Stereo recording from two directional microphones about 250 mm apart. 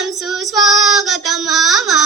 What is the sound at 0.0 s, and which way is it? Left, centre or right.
Female singing, centre.